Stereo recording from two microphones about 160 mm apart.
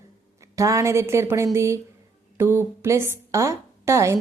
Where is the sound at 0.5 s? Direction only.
20° right (ahead or behind).